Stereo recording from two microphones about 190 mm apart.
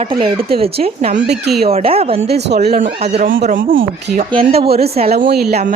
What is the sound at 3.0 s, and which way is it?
Speech, 35° right (ahead or behind).